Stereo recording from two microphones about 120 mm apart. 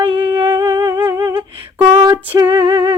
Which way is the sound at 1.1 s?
40° right (ahead or behind).